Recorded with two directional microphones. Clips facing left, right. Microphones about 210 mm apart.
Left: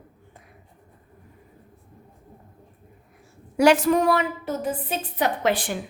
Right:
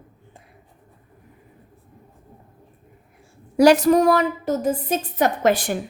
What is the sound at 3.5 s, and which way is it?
A woman's voice, 40° right (ahead or behind).